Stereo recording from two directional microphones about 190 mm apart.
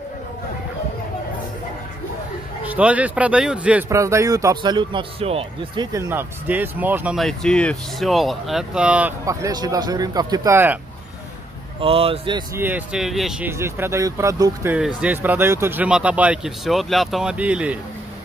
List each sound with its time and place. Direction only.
2.6 s speech: 5° right (ahead or behind); by 5.9 s 30° right (ahead or behind)
5.9 s speech: 10° right (ahead or behind)
11.8 s speech: 30° right (ahead or behind)
12.5 s speech: 10° right (ahead or behind)